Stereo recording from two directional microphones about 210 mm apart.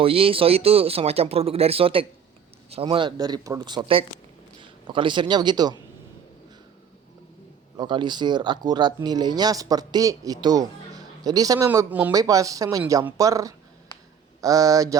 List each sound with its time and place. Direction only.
0.0 s a man's voice: 25° right (ahead or behind)
7.8 s speech: 20° right (ahead or behind)